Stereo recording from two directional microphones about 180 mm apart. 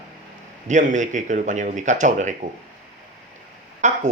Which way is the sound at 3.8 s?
40° right (ahead or behind).